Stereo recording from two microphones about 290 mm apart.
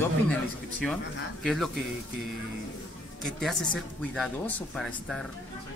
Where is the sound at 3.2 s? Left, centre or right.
Centre.